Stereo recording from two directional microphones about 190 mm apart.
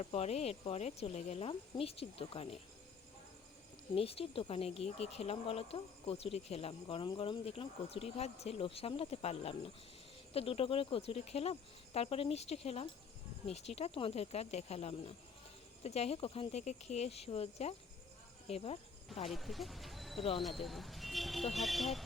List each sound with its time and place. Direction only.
0.0 s speech: 30° left (ahead or behind)
3.9 s speech: 30° left (ahead or behind)
19.3 s speech: centre (ahead or behind)